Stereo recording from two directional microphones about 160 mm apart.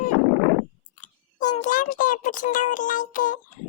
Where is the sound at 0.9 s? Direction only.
50° left (ahead or behind).